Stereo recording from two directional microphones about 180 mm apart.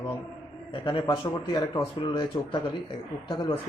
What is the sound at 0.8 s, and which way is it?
A man's voice, 30° left (ahead or behind).